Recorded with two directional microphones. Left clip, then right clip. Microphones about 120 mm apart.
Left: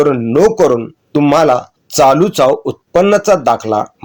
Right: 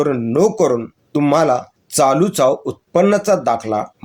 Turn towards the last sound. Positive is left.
turn(degrees=40)  # may be behind; listen again after turning